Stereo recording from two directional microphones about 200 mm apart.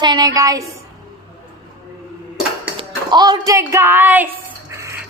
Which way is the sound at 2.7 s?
20° right (ahead or behind).